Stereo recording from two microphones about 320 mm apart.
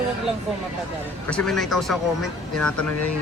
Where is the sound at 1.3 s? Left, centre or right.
Centre.